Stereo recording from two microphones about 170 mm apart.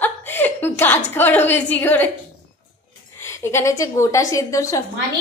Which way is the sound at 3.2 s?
15° left (ahead or behind).